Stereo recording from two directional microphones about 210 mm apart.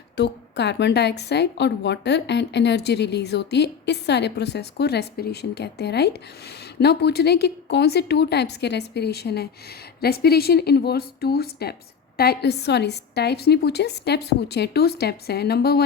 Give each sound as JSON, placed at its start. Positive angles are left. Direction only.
{"t": 0.2, "sound": "a woman's voice", "side_deg": 55}